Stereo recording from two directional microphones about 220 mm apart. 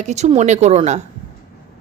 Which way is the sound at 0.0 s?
30° right (ahead or behind).